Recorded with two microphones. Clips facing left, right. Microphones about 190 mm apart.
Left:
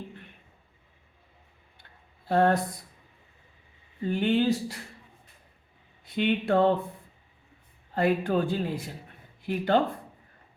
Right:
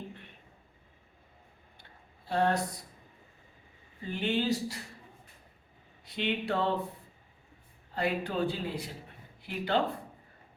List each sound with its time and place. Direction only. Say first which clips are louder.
2.3 s speech: left 5 dB; 55° left (ahead or behind)
4.1 s speech: left 6 dB; 55° left (ahead or behind)
6.1 s speech: left 7 dB; 50° left (ahead or behind)
7.9 s speech: left 6 dB; 50° left (ahead or behind)